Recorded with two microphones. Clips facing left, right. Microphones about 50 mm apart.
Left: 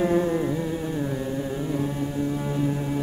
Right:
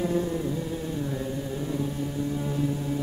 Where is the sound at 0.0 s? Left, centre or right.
Left.